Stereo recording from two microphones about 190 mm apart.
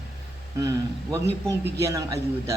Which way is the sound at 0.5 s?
20° right (ahead or behind).